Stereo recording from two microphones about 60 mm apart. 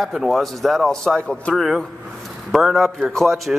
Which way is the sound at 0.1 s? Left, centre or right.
Centre.